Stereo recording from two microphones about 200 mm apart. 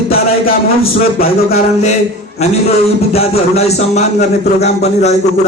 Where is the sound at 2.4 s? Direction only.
30° left (ahead or behind).